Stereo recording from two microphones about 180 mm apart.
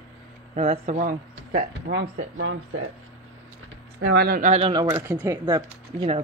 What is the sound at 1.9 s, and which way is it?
Speech, 90° right.